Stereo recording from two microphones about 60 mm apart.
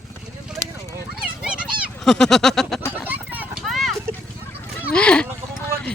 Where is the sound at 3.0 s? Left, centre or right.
Right.